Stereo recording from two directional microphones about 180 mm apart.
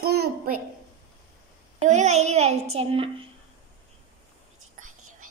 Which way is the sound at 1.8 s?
40° right (ahead or behind).